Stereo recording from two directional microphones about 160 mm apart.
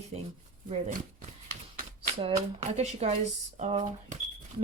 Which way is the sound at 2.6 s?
40° right (ahead or behind).